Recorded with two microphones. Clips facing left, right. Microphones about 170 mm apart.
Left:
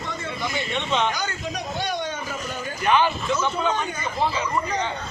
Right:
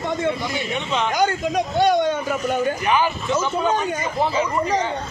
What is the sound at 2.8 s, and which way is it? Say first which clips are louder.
Speech: left 4 dB; 10° right (ahead or behind).